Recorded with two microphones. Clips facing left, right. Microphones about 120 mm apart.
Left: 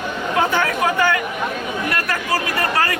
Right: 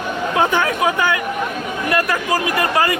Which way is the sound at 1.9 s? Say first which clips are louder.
Right 6 dB; 15° right (ahead or behind).